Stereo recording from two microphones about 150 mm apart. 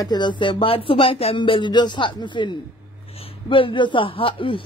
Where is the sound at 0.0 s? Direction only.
30° left (ahead or behind).